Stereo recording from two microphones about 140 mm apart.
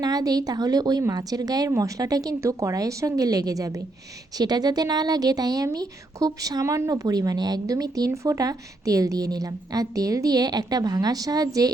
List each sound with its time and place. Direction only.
0.0 s a woman's voice: 25° right (ahead or behind)